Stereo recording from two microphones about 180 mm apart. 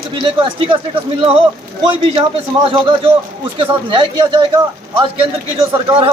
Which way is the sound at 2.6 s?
30° right (ahead or behind).